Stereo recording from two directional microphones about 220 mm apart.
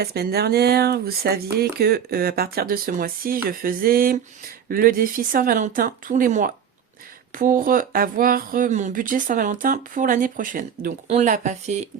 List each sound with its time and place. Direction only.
0.0 s speech: 45° right (ahead or behind)